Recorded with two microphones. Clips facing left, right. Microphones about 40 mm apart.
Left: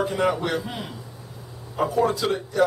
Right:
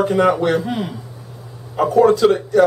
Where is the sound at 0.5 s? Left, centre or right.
Right.